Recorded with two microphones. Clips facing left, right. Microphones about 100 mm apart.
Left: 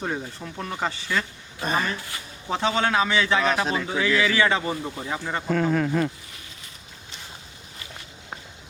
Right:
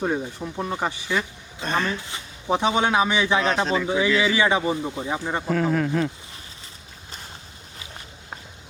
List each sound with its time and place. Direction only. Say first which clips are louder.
0.0 s speech: right 5 dB; 10° right (ahead or behind)
1.6 s speech: right 1 dB; 5° left (ahead or behind)
1.9 s speech: right 2 dB; 20° right (ahead or behind)
3.4 s speech: right 1 dB; 5° left (ahead or behind)
3.8 s speech: right 2 dB; 15° right (ahead or behind)
5.5 s speech: even; centre (ahead or behind)